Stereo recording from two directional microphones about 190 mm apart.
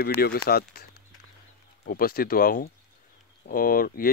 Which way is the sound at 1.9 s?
50° left (ahead or behind).